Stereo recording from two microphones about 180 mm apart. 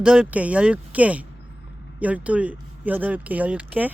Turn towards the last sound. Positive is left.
turn(degrees=-10)  # may be behind; listen again after turning